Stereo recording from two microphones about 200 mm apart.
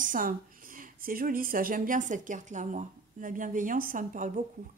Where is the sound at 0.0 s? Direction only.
40° right (ahead or behind).